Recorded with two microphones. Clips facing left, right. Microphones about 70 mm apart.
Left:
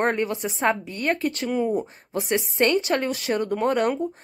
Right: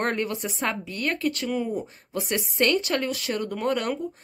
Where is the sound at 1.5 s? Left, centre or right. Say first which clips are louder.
Left 4 dB; centre.